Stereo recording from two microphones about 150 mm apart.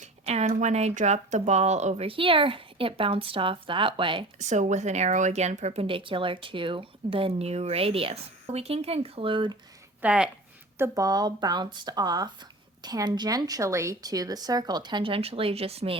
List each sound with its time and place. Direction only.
0.0 s speech: 45° right (ahead or behind)
4.4 s speech: 50° right (ahead or behind); by 9.6 s 35° right (ahead or behind)
10.0 s speech: 5° right (ahead or behind)
10.8 s speech: 20° right (ahead or behind); by 16.0 s 40° right (ahead or behind)